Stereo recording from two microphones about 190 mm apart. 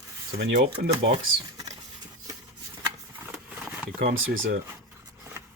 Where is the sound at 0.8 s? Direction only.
50° right (ahead or behind).